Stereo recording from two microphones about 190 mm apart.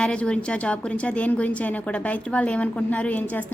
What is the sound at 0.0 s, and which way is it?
A woman's voice, 5° left (ahead or behind).